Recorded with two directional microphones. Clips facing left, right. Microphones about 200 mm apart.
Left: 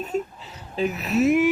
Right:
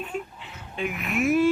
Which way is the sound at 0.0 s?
40° left (ahead or behind).